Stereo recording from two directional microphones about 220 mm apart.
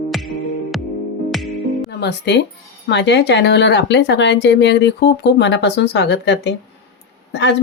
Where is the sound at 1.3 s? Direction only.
Centre (ahead or behind).